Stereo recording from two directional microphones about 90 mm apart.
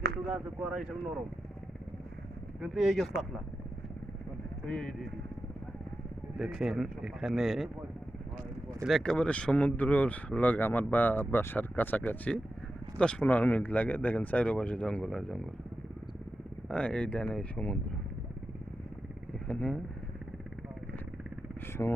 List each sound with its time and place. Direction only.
0.3 s speech: 10° right (ahead or behind)
2.6 s speech: 5° right (ahead or behind)
4.6 s speech: 10° left (ahead or behind)
6.4 s speech: 5° right (ahead or behind)
8.9 s speech: 5° left (ahead or behind)
16.6 s speech: 10° left (ahead or behind)
19.5 s speech: 15° left (ahead or behind)